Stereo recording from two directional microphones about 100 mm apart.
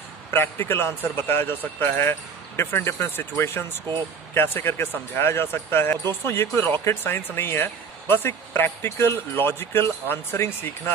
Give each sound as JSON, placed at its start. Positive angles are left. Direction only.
{"t": 0.3, "sound": "speech", "side_deg": 25}